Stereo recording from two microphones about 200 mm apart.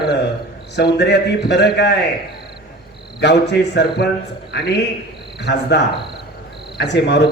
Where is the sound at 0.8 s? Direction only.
55° left (ahead or behind).